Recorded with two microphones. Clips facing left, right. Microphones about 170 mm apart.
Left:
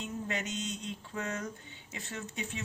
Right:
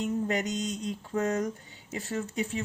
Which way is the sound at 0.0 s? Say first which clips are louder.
Right 8 dB; 35° right (ahead or behind).